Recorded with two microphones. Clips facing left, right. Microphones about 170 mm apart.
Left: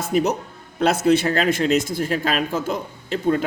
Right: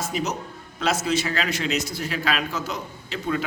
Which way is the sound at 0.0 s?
55° left (ahead or behind).